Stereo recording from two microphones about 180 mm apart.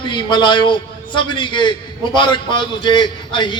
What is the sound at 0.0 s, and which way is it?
A man's voice, 25° left (ahead or behind).